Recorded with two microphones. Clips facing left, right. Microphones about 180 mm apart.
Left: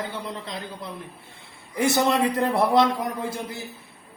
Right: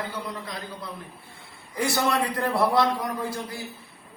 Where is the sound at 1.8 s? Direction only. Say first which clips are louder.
Left 4 dB; 20° left (ahead or behind).